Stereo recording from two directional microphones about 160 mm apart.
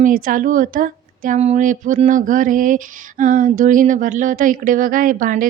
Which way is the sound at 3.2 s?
55° right (ahead or behind).